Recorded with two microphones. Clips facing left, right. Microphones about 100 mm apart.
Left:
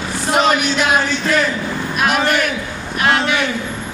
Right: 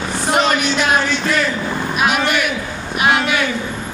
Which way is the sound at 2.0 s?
5° right (ahead or behind).